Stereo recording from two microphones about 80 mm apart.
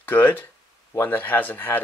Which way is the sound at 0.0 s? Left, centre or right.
Left.